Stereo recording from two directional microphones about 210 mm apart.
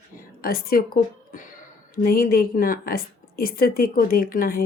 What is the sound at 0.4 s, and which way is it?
A woman's voice, 45° left (ahead or behind).